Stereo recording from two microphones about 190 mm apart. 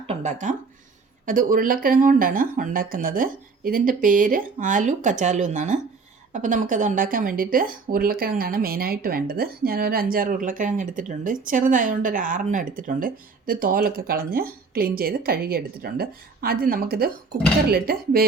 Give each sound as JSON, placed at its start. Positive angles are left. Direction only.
{"t": 0.1, "sound": "speech", "side_deg": -35}